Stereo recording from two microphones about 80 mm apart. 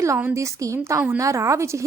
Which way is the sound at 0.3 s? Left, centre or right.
Right.